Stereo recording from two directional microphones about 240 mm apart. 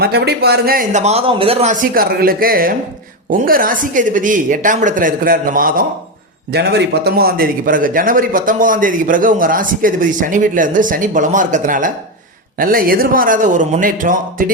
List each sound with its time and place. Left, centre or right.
0.0 s a man's voice: right